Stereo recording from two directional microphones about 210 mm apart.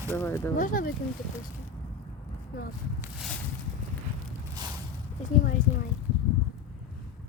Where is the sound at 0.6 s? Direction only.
40° left (ahead or behind).